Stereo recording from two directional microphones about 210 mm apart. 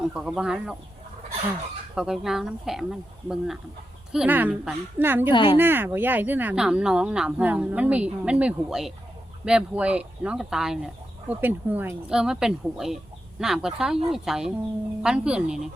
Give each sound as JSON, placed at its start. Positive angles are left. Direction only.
{"t": 0.1, "sound": "speech", "side_deg": -5}
{"t": 2.0, "sound": "speech", "side_deg": 0}
{"t": 5.3, "sound": "speech", "side_deg": 25}
{"t": 5.5, "sound": "speech", "side_deg": -10}